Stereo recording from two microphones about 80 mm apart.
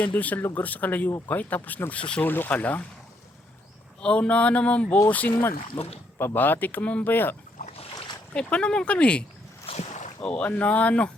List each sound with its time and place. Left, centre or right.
0.0 s speech: centre
2.2 s speech: left
4.0 s speech: centre
8.3 s speech: centre
10.2 s speech: centre